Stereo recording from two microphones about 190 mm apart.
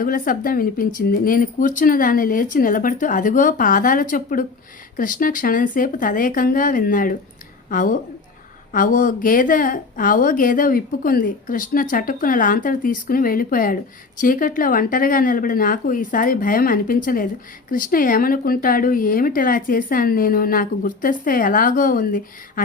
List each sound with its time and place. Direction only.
0.0 s a woman's voice: 50° left (ahead or behind)